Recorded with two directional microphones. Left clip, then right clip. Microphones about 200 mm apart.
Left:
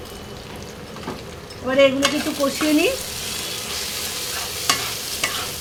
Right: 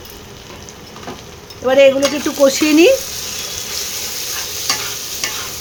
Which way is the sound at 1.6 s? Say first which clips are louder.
Right 6 dB; 50° right (ahead or behind).